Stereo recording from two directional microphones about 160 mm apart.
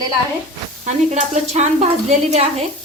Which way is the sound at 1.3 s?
45° right (ahead or behind).